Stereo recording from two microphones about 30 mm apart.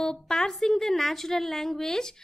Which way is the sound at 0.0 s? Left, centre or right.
Centre.